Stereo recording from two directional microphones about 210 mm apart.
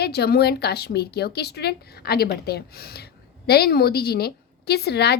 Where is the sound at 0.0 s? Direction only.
50° left (ahead or behind).